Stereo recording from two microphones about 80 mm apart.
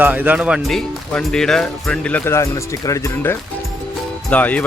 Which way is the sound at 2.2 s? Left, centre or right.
Left.